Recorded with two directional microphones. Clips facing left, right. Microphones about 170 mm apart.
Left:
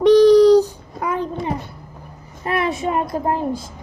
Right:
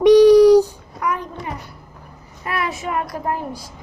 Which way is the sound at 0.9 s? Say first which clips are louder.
Left 2 dB; 25° left (ahead or behind).